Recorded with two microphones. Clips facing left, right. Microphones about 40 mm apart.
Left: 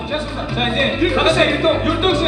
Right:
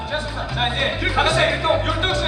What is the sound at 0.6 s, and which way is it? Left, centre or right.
Music, left.